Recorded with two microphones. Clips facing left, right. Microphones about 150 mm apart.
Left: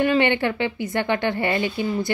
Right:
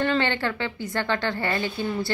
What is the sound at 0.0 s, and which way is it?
Speech, 15° left (ahead or behind).